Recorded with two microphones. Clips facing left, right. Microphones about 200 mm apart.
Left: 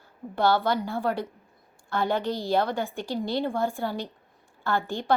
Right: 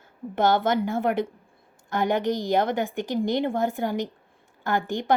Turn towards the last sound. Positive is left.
turn(degrees=-15)  # may be behind; listen again after turning